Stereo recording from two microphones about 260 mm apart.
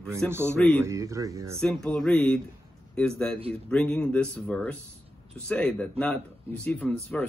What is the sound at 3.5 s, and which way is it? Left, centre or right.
Speech, centre.